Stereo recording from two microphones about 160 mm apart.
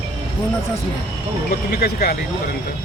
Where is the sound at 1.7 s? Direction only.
75° left (ahead or behind).